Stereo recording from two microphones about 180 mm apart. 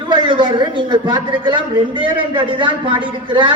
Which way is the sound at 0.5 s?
25° right (ahead or behind).